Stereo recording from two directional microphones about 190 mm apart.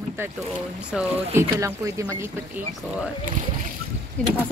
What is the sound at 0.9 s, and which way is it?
Speech, 5° right (ahead or behind).